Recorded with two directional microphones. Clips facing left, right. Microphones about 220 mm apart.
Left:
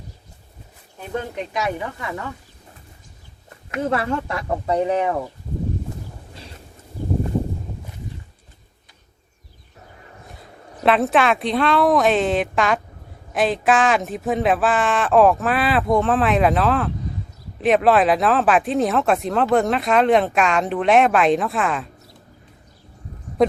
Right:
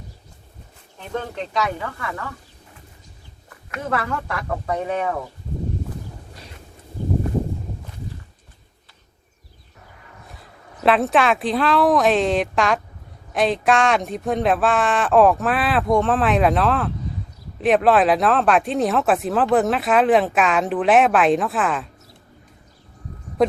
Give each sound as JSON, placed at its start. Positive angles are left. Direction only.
{"t": 0.9, "sound": "speech", "side_deg": 15}
{"t": 3.7, "sound": "speech", "side_deg": 25}
{"t": 10.8, "sound": "speech", "side_deg": 0}
{"t": 23.4, "sound": "speech", "side_deg": 0}